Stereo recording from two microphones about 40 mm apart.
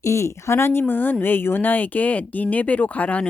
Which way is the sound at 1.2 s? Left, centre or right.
Left.